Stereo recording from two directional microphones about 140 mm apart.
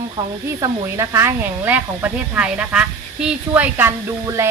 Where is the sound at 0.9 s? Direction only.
20° right (ahead or behind).